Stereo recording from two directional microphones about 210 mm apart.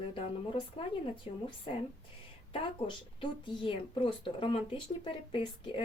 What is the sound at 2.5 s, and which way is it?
Speech, 25° left (ahead or behind).